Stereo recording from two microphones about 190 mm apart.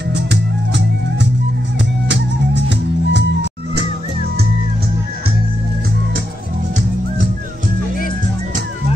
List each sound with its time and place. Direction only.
0.1 s music: 65° right (ahead or behind)